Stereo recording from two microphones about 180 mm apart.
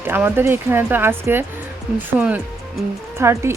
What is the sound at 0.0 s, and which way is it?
A woman's voice, 10° right (ahead or behind).